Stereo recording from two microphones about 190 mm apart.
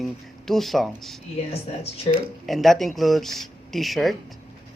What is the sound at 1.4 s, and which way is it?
Speech, 35° left (ahead or behind).